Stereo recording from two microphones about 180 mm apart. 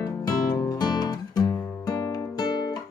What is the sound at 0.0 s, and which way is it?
Music, 20° left (ahead or behind).